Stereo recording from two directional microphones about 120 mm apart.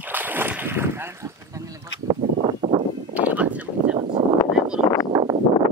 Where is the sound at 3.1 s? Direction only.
10° right (ahead or behind).